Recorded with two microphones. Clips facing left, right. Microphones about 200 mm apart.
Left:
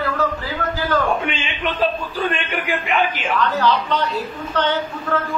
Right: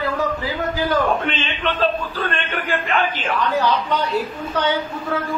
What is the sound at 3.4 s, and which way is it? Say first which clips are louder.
Speech: left 1 dB; 10° right (ahead or behind).